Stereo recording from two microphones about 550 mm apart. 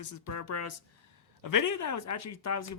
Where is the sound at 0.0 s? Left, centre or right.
Left.